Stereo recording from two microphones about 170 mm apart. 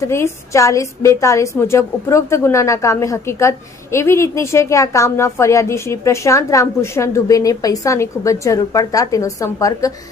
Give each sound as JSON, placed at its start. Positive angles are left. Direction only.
{"t": 0.1, "sound": "a woman's voice", "side_deg": 15}